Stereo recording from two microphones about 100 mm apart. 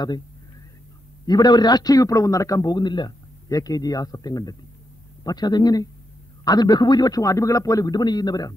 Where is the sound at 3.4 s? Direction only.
35° left (ahead or behind).